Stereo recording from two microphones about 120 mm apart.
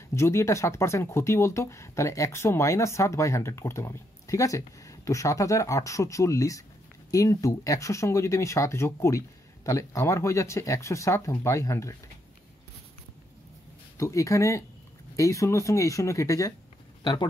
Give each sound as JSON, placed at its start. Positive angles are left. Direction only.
{"t": 0.1, "sound": "speech", "side_deg": 25}
{"t": 13.9, "sound": "speech", "side_deg": 25}
{"t": 17.0, "sound": "speech", "side_deg": 40}